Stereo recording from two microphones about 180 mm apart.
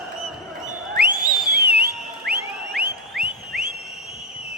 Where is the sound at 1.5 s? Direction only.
60° right (ahead or behind).